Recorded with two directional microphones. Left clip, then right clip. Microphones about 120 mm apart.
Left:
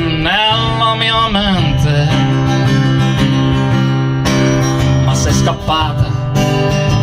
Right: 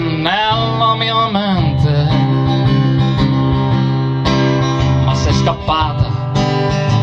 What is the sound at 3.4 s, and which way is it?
Music, 5° right (ahead or behind).